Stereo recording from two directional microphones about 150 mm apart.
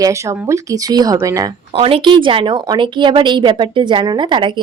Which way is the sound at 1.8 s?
35° right (ahead or behind).